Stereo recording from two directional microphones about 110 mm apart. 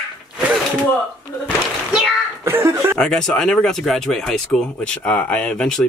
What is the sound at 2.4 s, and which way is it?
Speech, 25° right (ahead or behind).